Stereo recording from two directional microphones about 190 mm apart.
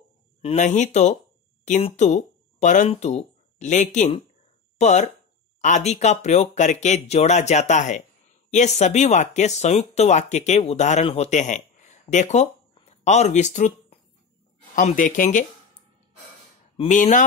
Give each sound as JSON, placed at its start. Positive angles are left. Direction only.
{"t": 0.4, "sound": "speech", "side_deg": 35}
{"t": 16.7, "sound": "speech", "side_deg": 40}